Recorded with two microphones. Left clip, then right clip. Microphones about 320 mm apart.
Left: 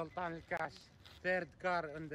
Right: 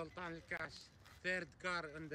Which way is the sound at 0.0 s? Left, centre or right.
Centre.